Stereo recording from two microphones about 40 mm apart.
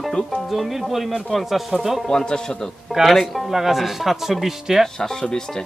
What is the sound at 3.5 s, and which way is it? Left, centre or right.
Speech, centre.